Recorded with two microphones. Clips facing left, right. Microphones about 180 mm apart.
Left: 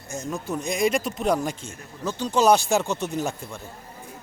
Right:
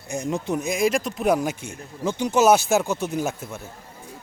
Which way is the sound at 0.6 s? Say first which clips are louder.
Left 1 dB; centre (ahead or behind).